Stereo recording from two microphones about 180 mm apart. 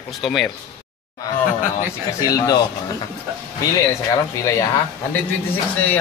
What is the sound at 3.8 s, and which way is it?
Speech, 15° left (ahead or behind).